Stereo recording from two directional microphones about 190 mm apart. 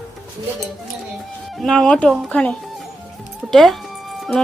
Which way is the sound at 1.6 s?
5° left (ahead or behind).